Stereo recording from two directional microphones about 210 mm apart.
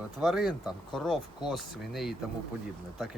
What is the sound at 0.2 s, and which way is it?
Speech, centre (ahead or behind).